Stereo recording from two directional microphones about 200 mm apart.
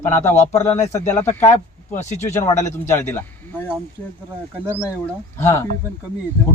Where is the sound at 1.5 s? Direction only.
35° left (ahead or behind).